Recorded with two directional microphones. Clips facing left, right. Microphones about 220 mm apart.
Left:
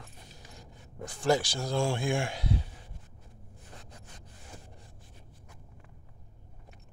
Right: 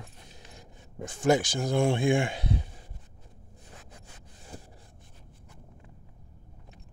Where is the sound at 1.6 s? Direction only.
20° right (ahead or behind).